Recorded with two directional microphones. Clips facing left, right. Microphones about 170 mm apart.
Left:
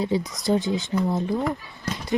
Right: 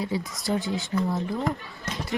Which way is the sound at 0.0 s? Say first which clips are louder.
Left 5 dB; 20° left (ahead or behind).